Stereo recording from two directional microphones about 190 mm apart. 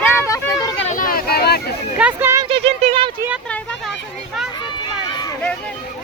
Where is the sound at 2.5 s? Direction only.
30° right (ahead or behind).